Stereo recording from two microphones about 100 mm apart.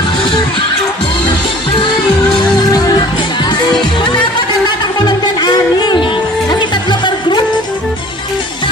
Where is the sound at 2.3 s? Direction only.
50° left (ahead or behind).